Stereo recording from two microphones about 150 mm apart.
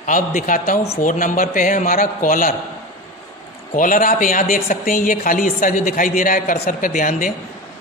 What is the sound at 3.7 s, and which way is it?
A man's voice, 65° left (ahead or behind).